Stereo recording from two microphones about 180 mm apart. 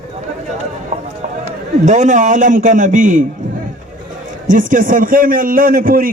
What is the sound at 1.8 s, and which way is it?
A man's voice, 40° right (ahead or behind).